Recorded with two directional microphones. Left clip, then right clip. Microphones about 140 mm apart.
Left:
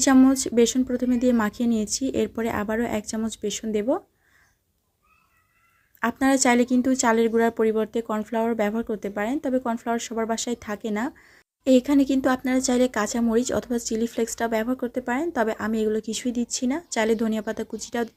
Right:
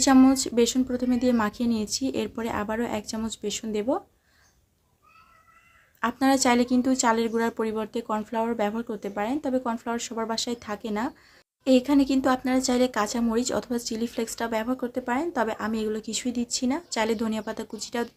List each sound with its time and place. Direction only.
0.0 s speech: 30° left (ahead or behind)
6.0 s speech: 35° left (ahead or behind)